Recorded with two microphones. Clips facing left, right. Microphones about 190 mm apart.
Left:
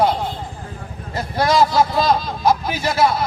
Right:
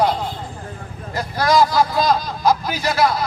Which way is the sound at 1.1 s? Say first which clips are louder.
Even; 25° left (ahead or behind).